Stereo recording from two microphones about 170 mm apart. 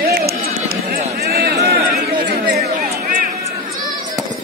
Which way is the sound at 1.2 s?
65° right (ahead or behind).